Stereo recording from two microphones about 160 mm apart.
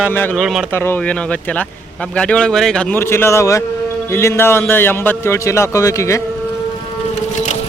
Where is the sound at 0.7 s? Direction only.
10° left (ahead or behind).